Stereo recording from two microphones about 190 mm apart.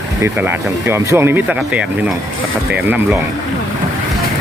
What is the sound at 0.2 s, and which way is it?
Speech, 10° right (ahead or behind).